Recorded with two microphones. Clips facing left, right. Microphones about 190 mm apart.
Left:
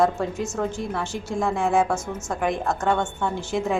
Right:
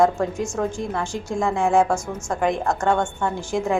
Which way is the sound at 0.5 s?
15° right (ahead or behind).